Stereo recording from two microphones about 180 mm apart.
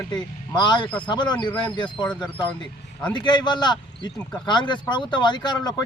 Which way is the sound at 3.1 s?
25° left (ahead or behind).